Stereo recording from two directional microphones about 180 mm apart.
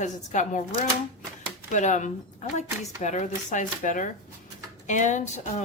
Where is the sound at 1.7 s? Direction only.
45° left (ahead or behind).